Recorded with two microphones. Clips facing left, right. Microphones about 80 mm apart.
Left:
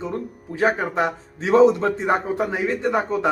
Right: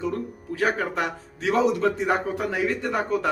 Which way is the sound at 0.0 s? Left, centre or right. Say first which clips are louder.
Even; left.